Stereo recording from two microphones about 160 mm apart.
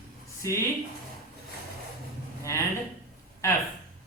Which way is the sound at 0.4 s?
20° left (ahead or behind).